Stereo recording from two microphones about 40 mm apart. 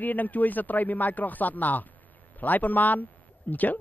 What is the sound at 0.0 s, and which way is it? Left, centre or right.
Speech, left.